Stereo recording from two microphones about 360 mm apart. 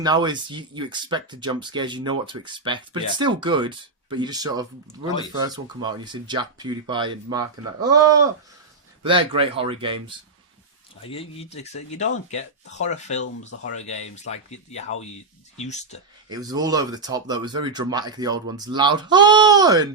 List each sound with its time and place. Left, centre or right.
0.0 s speech: centre
11.0 s speech: centre
16.3 s speech: centre